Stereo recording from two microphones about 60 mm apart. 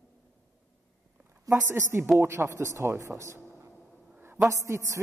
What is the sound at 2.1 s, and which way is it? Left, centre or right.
A man's voice, right.